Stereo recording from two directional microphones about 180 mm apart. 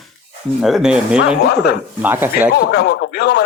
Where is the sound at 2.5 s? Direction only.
65° left (ahead or behind).